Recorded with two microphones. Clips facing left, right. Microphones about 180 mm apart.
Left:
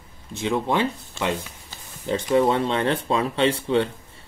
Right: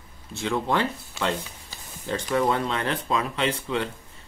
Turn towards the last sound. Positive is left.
turn(degrees=30)  # may be behind; listen again after turning